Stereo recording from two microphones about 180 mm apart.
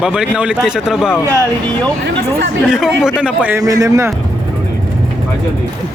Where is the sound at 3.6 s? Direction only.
20° right (ahead or behind).